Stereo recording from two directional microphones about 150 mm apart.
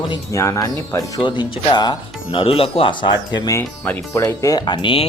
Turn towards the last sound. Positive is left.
turn(degrees=35)  # may be behind; listen again after turning